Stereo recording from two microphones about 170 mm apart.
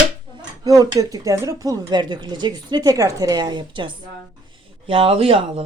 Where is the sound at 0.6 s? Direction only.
20° right (ahead or behind).